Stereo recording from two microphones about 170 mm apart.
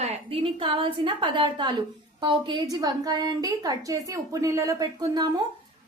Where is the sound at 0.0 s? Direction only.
35° right (ahead or behind).